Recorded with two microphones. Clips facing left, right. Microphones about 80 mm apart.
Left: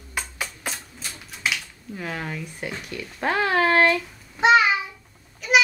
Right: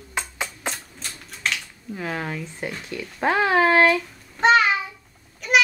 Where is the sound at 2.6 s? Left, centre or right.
Centre.